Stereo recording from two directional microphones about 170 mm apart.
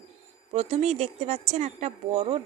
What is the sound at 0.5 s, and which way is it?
Speech, 35° right (ahead or behind).